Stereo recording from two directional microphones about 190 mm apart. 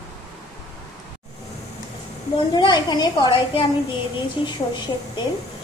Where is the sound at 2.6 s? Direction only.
20° left (ahead or behind).